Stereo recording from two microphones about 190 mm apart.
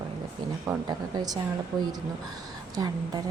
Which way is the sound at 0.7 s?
20° right (ahead or behind).